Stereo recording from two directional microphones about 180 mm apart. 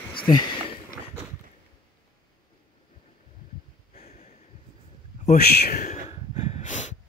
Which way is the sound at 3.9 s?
35° left (ahead or behind).